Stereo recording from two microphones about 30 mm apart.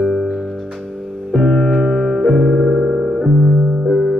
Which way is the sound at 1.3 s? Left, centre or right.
Centre.